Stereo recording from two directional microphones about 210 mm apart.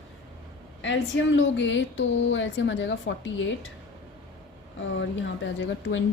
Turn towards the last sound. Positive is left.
turn(degrees=65)  # may be behind; listen again after turning